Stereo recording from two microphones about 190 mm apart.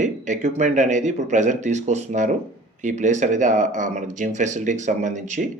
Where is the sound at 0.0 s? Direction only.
40° right (ahead or behind).